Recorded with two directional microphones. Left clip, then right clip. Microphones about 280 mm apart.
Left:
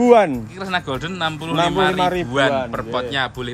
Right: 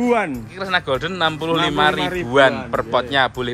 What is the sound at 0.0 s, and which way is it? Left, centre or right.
Speech, left.